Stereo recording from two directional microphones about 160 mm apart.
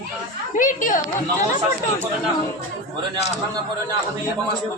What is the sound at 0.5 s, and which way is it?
Speech, 55° left (ahead or behind).